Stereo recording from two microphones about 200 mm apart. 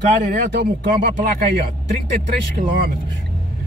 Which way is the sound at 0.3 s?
55° right (ahead or behind).